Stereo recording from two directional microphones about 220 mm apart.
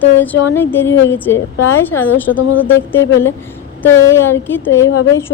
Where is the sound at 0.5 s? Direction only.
10° left (ahead or behind).